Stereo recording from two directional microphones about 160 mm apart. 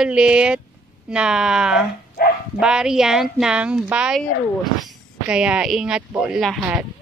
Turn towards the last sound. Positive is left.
turn(degrees=-5)  # may be behind; listen again after turning